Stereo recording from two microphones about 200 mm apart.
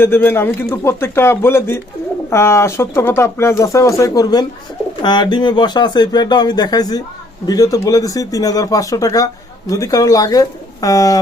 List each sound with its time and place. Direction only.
0.0 s speech: 10° left (ahead or behind)